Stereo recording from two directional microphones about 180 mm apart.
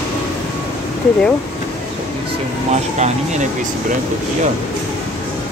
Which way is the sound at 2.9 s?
40° right (ahead or behind).